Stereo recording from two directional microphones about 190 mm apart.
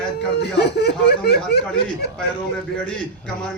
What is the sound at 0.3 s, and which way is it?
Speech, 60° left (ahead or behind).